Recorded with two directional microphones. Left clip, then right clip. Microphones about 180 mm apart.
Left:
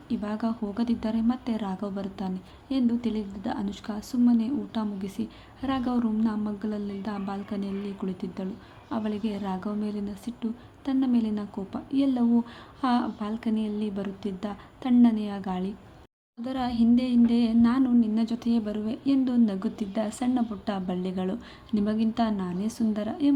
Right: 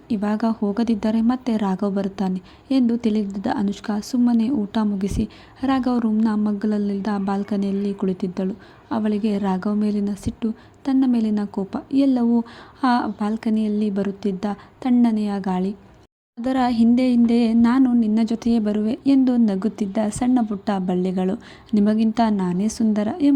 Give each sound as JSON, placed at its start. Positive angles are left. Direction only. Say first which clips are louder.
{"t": 0.1, "sound": "a woman's voice", "louder": "right 8 dB", "side_deg": -35}